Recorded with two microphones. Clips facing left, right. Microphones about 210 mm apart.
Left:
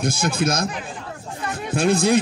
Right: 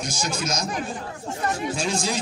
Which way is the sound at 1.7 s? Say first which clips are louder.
Left 8 dB; 55° left (ahead or behind).